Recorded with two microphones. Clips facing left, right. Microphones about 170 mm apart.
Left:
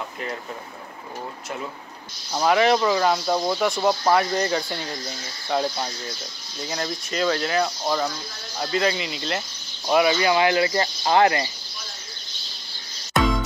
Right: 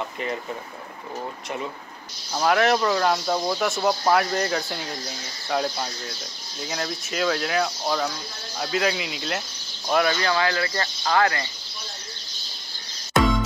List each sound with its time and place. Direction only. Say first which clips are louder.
2.3 s speech: left 1 dB; centre (ahead or behind); by 11.5 s 20° left (ahead or behind)
13.1 s music: right 1 dB; centre (ahead or behind)